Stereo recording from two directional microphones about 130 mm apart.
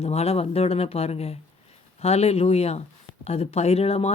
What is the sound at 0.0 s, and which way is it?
Speech, 55° left (ahead or behind).